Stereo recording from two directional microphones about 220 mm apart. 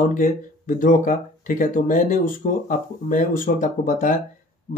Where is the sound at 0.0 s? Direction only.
35° left (ahead or behind).